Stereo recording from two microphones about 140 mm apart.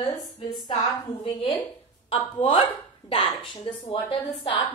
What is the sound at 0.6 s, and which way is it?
A woman's voice, 30° left (ahead or behind).